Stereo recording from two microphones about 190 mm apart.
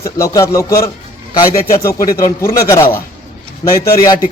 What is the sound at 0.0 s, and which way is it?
A man's voice, 15° left (ahead or behind).